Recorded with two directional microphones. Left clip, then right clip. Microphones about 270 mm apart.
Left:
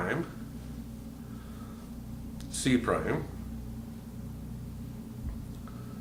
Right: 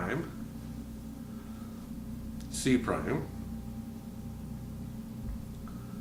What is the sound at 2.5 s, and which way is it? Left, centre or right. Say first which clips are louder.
Speech: left 2 dB; left.